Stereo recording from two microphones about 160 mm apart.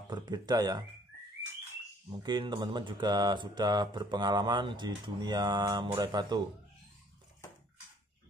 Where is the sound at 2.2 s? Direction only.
30° right (ahead or behind).